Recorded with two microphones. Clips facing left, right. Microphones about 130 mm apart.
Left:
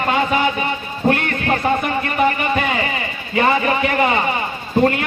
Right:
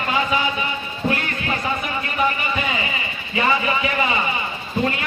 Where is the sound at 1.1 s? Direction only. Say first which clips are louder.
Left 7 dB; 55° left (ahead or behind).